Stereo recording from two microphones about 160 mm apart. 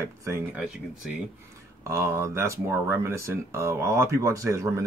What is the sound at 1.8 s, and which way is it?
Speech, 15° right (ahead or behind).